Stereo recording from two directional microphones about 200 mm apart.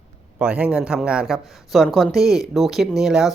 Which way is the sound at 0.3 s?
5° right (ahead or behind).